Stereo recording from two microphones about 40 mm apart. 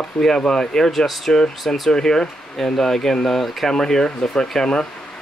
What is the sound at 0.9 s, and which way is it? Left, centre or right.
Speech, centre.